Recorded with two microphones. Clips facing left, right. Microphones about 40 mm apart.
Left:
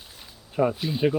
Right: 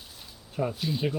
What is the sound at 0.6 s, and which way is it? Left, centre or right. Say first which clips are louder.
Speech: left 6 dB; centre.